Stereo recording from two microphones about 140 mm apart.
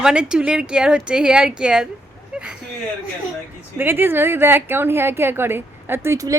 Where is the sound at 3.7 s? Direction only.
15° right (ahead or behind).